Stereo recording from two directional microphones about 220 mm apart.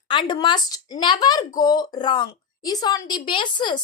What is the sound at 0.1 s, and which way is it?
Speech, 20° left (ahead or behind).